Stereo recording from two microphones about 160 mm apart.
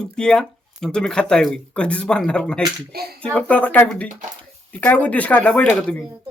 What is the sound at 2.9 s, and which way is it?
Speech, 75° right (ahead or behind).